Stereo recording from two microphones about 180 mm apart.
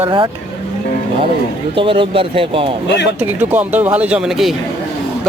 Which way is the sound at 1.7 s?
30° right (ahead or behind).